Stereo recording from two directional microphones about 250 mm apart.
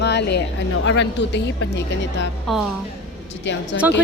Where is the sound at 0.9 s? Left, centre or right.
Left.